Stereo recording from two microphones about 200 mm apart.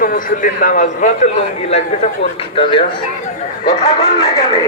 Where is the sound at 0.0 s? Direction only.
45° left (ahead or behind); by 2.8 s 30° left (ahead or behind).